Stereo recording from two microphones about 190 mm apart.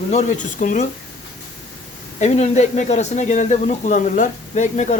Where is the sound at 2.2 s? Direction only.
40° left (ahead or behind).